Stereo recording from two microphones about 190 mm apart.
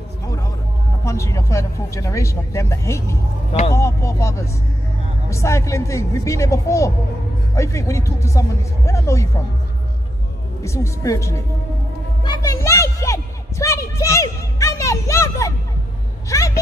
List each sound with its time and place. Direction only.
1.0 s speech: 15° left (ahead or behind)
10.6 s speech: 15° left (ahead or behind)
12.2 s music: 20° left (ahead or behind)
16.3 s speech: 15° left (ahead or behind)